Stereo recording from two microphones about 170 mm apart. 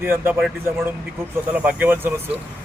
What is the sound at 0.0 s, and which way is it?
Speech, 15° right (ahead or behind).